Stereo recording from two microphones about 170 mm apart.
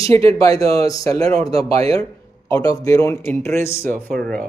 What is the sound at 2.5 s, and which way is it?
Speech, 20° left (ahead or behind).